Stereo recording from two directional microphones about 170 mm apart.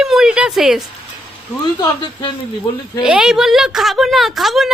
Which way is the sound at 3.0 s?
5° right (ahead or behind).